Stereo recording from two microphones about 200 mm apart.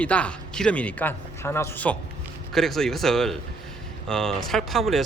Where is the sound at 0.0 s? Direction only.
5° left (ahead or behind).